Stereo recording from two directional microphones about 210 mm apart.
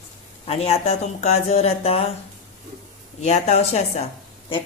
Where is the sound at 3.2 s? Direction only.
30° left (ahead or behind).